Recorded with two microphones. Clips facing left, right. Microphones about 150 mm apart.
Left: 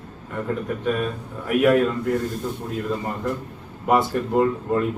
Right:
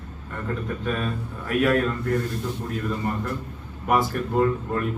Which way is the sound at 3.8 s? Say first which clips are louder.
Left 3 dB; 20° left (ahead or behind).